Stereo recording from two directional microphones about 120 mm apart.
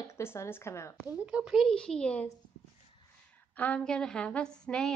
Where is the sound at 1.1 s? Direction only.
10° right (ahead or behind); by 2.3 s 10° left (ahead or behind).